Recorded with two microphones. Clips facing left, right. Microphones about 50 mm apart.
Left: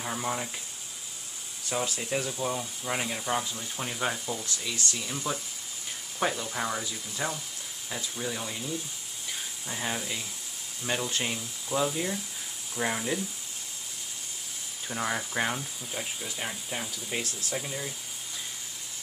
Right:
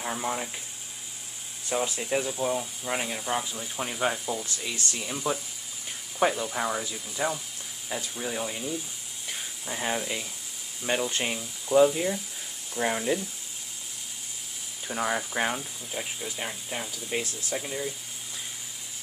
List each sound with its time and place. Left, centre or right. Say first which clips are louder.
0.0 s speech: right 1 dB; centre
2.0 s speech: right 3 dB; centre
11.3 s speech: right 9 dB; centre
14.9 s speech: right 3 dB; centre